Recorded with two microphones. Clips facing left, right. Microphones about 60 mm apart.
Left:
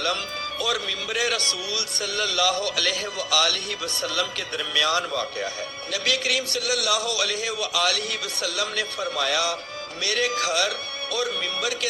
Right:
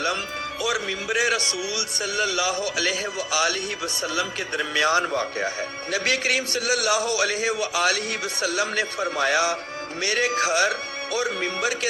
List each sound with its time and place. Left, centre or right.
0.6 s a man's voice: centre